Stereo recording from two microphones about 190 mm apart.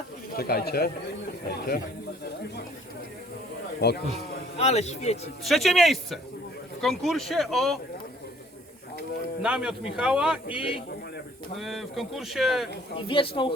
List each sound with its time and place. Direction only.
0.3 s speech: 55° left (ahead or behind)
3.8 s speech: 60° left (ahead or behind)
4.5 s speech: 35° left (ahead or behind)
5.4 s a man's voice: centre (ahead or behind)
9.4 s a man's voice: 5° right (ahead or behind)
13.0 s speech: 30° left (ahead or behind)